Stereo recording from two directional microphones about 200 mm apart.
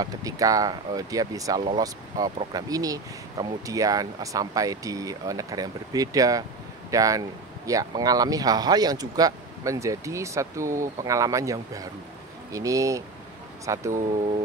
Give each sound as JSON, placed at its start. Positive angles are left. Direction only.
{"t": 0.0, "sound": "speech", "side_deg": -15}